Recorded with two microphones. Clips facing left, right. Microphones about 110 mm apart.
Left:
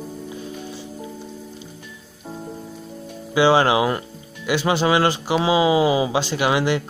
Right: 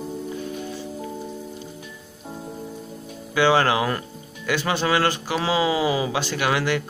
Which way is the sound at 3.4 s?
20° left (ahead or behind).